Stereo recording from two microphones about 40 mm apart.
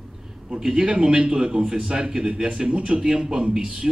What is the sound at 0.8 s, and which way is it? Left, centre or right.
A man's voice, right.